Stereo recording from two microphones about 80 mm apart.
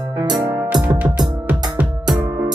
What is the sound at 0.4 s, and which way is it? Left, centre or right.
Music, right.